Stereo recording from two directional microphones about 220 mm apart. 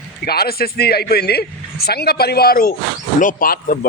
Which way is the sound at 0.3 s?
45° left (ahead or behind).